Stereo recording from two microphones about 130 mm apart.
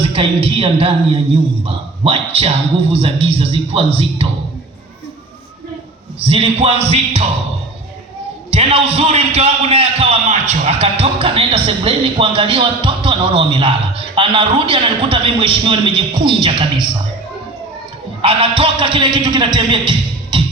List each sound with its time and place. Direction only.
0.0 s a man's voice: 45° right (ahead or behind)
6.1 s a man's voice: 45° right (ahead or behind)
8.4 s a man's voice: 50° right (ahead or behind)
18.2 s a man's voice: 45° right (ahead or behind)